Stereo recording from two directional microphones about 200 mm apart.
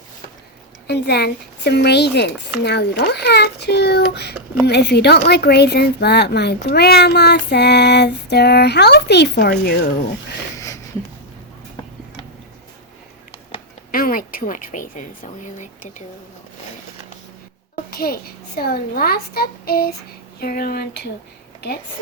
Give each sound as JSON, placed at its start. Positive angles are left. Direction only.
{"t": 0.9, "sound": "speech", "side_deg": 55}
{"t": 13.9, "sound": "a woman's voice", "side_deg": 45}
{"t": 17.7, "sound": "a child's voice", "side_deg": 50}